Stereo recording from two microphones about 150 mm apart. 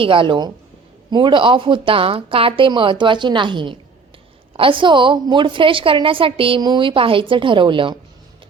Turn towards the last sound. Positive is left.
turn(degrees=-35)  # may be behind; listen again after turning